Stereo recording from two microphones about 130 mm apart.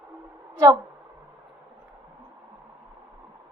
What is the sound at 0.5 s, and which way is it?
Speech, 25° right (ahead or behind).